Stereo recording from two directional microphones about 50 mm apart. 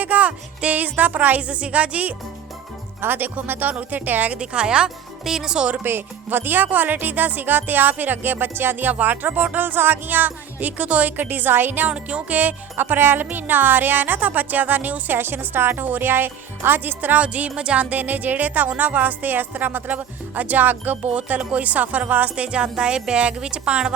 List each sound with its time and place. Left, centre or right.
0.0 s speech: right
3.0 s speech: right
4.3 s speech: right
5.8 s speech: right
11.9 s speech: right